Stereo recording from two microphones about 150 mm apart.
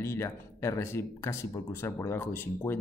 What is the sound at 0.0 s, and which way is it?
Speech, 20° left (ahead or behind).